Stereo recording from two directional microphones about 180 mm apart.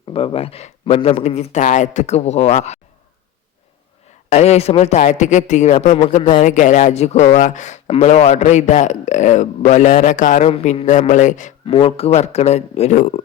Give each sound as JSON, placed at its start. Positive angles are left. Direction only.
{"t": 0.1, "sound": "speech", "side_deg": 30}
{"t": 4.3, "sound": "speech", "side_deg": 35}
{"t": 11.6, "sound": "speech", "side_deg": 30}